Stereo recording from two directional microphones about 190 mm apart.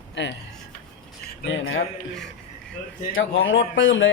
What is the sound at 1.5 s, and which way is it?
Speech, 90° left.